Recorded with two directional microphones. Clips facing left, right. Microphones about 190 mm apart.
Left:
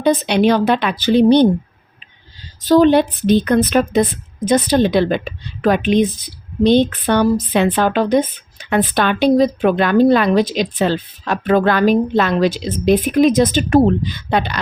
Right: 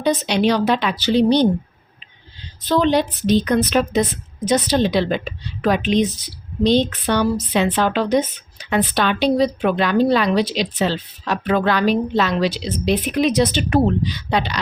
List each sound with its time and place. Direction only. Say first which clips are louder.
0.0 s a woman's voice: left 4 dB; 55° left (ahead or behind)
2.6 s a woman's voice: left 6 dB; 45° left (ahead or behind)